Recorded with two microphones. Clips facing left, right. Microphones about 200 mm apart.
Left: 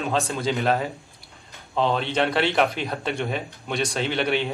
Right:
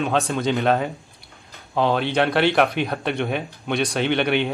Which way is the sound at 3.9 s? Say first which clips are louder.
Right 5 dB; 65° right (ahead or behind).